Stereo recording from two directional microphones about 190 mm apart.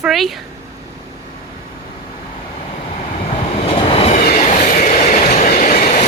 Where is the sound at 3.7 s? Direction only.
30° left (ahead or behind).